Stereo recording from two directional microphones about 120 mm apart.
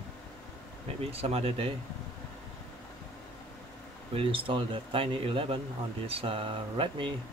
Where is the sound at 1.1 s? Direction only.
55° right (ahead or behind).